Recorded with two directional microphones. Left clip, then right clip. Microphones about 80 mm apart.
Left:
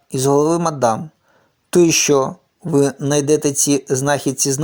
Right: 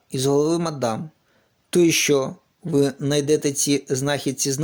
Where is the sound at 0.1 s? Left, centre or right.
Left.